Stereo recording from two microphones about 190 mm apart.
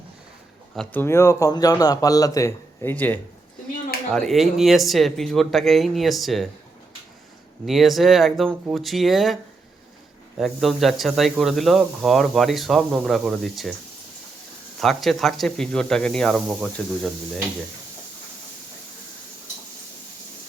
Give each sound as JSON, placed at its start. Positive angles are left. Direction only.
{"t": 0.8, "sound": "speech", "side_deg": 10}
{"t": 7.6, "sound": "speech", "side_deg": 0}
{"t": 14.8, "sound": "speech", "side_deg": 0}